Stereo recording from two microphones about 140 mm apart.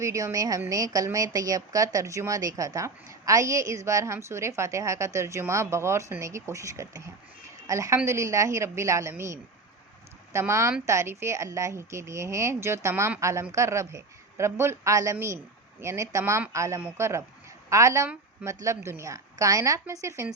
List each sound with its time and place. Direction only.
0.0 s a woman's voice: 25° right (ahead or behind)